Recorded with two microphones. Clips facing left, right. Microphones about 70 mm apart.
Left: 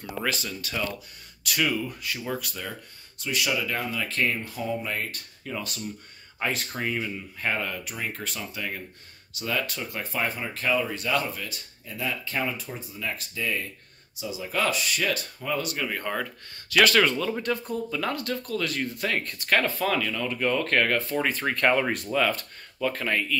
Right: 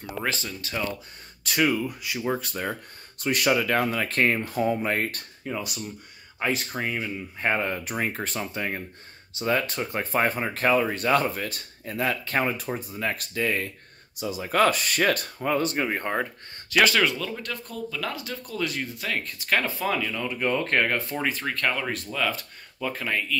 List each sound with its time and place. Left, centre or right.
0.2 s speech: right
1.6 s speech: centre
2.2 s speech: right
2.7 s speech: right
5.4 s speech: centre
6.4 s speech: centre
7.3 s speech: right
16.7 s speech: centre
17.2 s speech: centre
18.1 s speech: centre
21.2 s speech: centre
21.5 s speech: centre